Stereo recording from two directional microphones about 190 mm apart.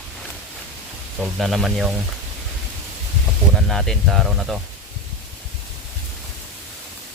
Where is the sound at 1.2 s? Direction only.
Centre (ahead or behind).